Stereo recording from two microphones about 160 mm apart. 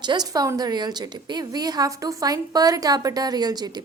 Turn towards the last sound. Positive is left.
turn(degrees=-25)  # may be behind; listen again after turning